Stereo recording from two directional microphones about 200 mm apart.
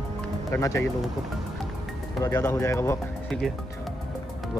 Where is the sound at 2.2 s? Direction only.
15° left (ahead or behind).